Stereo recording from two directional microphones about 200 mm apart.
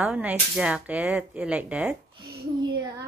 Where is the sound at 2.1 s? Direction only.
20° right (ahead or behind).